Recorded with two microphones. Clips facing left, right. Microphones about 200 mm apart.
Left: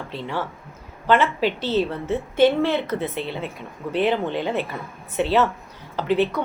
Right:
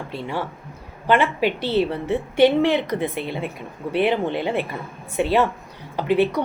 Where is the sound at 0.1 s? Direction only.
10° right (ahead or behind).